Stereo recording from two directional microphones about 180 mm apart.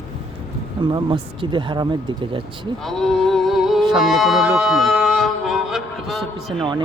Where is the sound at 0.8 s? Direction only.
25° right (ahead or behind).